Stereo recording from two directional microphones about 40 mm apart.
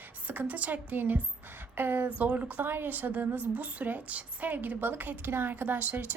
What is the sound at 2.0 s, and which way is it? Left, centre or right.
Speech, right.